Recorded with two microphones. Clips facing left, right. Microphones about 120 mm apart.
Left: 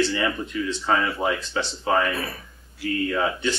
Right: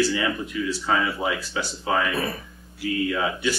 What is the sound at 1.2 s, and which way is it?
Speech, 20° left (ahead or behind).